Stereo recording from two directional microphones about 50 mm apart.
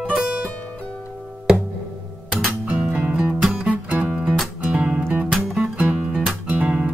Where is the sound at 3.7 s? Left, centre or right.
Right.